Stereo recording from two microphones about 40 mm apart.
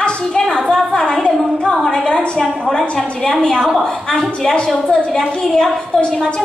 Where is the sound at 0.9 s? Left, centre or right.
Centre.